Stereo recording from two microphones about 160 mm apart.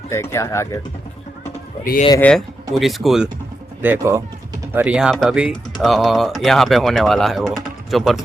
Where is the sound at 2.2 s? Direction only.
5° left (ahead or behind).